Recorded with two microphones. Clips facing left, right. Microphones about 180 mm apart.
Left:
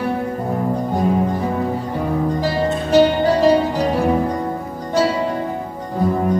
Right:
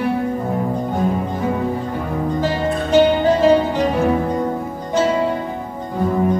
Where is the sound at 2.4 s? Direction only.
40° left (ahead or behind).